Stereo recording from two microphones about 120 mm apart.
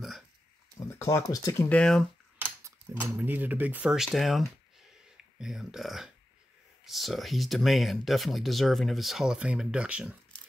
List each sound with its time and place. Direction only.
0.7 s speech: 25° left (ahead or behind)
1.7 s speech: 5° left (ahead or behind)
3.0 s speech: 15° right (ahead or behind)